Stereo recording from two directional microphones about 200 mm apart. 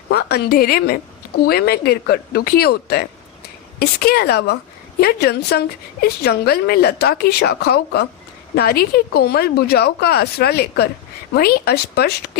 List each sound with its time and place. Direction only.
0.1 s a woman's voice: 50° left (ahead or behind)